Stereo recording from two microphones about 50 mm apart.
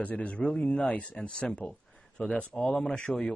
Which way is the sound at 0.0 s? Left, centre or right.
Left.